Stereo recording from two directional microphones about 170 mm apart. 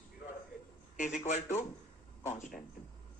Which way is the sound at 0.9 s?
50° left (ahead or behind).